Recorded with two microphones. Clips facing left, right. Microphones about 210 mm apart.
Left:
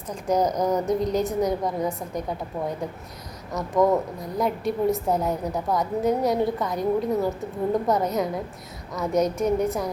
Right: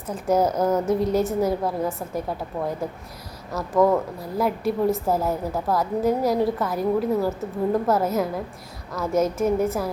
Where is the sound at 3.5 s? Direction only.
20° left (ahead or behind).